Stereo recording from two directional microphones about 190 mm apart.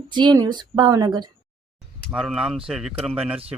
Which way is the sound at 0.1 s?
25° right (ahead or behind).